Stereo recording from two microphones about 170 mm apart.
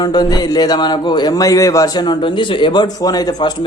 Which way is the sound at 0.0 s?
25° left (ahead or behind).